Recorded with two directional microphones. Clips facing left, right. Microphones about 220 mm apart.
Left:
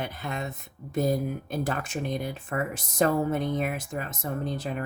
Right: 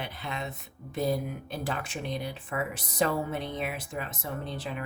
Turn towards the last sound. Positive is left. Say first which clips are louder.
# left 5 dB
turn(degrees=45)  # may be behind; listen again after turning